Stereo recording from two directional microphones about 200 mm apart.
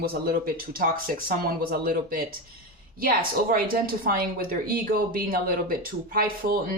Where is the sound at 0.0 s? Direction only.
45° right (ahead or behind).